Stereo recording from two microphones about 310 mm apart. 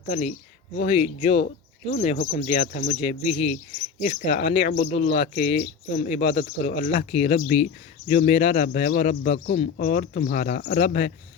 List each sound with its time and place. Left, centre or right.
0.1 s speech: left